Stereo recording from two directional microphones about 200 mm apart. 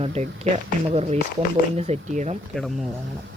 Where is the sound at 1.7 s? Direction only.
35° right (ahead or behind).